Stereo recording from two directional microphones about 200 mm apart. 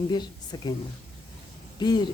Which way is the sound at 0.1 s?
20° left (ahead or behind).